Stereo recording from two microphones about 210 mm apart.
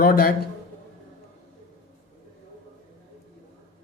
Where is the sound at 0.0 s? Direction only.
45° left (ahead or behind).